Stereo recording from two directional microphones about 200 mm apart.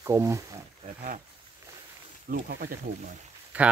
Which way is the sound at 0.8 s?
40° right (ahead or behind).